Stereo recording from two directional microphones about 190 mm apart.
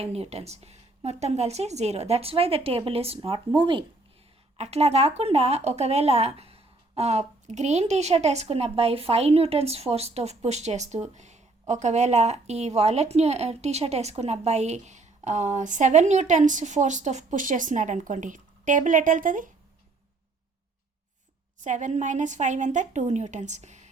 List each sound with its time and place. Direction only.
0.0 s speech: 35° right (ahead or behind)
21.6 s speech: 40° right (ahead or behind)